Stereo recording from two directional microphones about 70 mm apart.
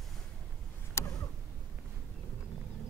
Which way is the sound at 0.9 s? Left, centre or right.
Left.